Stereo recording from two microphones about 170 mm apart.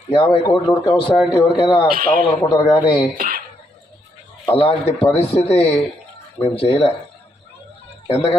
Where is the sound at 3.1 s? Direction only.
55° right (ahead or behind).